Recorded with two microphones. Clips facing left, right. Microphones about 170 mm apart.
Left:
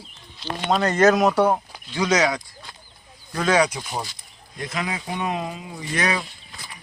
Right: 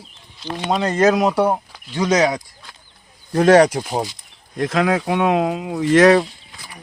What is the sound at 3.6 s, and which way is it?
Speech, 45° right (ahead or behind).